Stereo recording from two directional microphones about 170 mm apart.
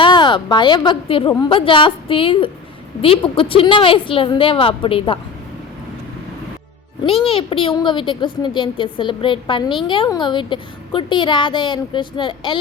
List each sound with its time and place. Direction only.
0.0 s a woman's voice: 30° left (ahead or behind)
7.3 s a woman's voice: 30° left (ahead or behind)